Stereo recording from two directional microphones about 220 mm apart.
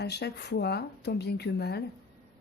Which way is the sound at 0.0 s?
50° left (ahead or behind).